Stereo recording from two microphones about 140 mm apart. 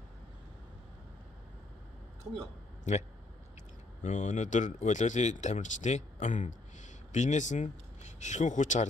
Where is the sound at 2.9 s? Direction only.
55° left (ahead or behind).